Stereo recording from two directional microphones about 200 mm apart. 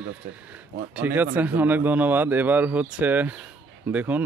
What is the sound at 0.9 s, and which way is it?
Speech, 10° right (ahead or behind).